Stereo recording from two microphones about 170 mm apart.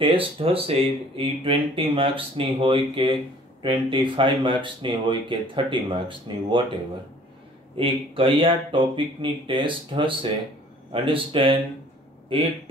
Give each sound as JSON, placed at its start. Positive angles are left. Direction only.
{"t": 0.0, "sound": "speech", "side_deg": -30}
{"t": 7.7, "sound": "speech", "side_deg": -30}